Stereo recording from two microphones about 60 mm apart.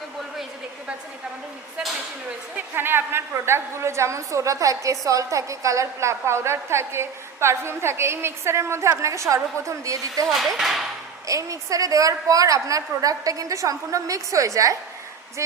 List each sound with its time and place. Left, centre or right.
2.6 s a woman's voice: right
10.2 s speech: centre
11.3 s a woman's voice: right